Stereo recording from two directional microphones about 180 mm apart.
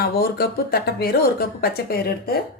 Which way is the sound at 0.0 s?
60° left (ahead or behind).